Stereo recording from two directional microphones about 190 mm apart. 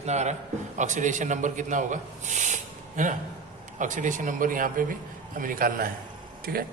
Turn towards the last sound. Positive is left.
turn(degrees=-50)  # may be behind; listen again after turning